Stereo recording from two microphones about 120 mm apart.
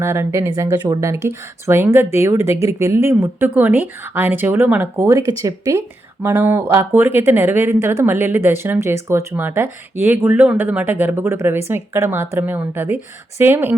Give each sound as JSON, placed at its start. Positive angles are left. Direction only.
{"t": 0.0, "sound": "speech", "side_deg": -20}
{"t": 6.2, "sound": "speech", "side_deg": -20}